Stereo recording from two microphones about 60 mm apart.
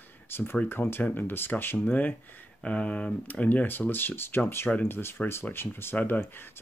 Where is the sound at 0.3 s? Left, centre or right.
Left.